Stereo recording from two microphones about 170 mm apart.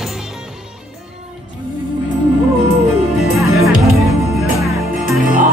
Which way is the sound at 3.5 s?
20° right (ahead or behind).